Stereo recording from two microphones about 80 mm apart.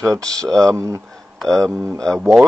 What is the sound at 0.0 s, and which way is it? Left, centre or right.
Speech, right.